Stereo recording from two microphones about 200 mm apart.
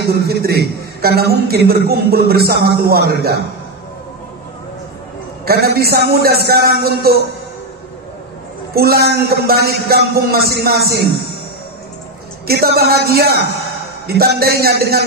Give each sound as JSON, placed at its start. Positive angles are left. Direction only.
{"t": 0.3, "sound": "a man's voice", "side_deg": -50}
{"t": 5.4, "sound": "a man's voice", "side_deg": -50}
{"t": 8.7, "sound": "a man's voice", "side_deg": -50}
{"t": 12.4, "sound": "a man's voice", "side_deg": -50}